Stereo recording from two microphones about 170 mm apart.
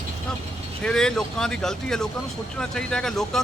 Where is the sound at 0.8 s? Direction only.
5° left (ahead or behind).